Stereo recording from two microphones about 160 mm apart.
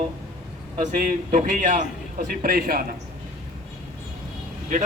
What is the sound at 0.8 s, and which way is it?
A man's voice, 50° right (ahead or behind).